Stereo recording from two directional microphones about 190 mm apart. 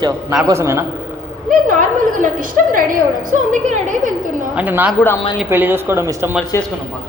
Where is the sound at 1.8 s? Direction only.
45° right (ahead or behind).